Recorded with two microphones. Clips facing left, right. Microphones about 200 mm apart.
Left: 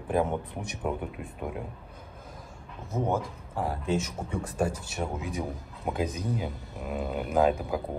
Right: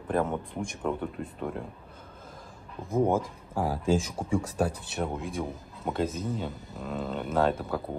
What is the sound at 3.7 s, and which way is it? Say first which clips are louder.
Speech: right 3 dB; 90° right.